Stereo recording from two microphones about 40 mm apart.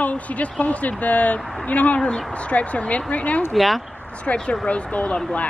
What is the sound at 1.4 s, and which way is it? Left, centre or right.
Speech, centre.